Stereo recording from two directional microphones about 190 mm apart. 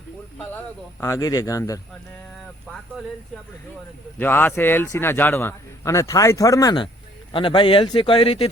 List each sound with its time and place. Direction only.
1.0 s a man's voice: 15° left (ahead or behind)
4.2 s a man's voice: 10° left (ahead or behind); by 8.4 s 30° left (ahead or behind)